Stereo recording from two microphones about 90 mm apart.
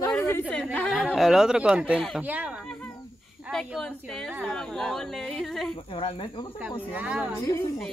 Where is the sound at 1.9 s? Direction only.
5° left (ahead or behind).